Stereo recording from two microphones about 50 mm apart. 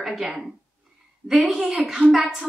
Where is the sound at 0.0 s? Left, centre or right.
Centre.